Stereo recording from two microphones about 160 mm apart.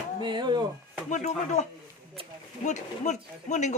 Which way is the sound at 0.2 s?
30° right (ahead or behind).